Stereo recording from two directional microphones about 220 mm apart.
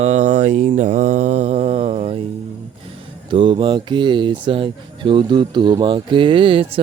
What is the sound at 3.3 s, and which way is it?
Speech, 20° right (ahead or behind).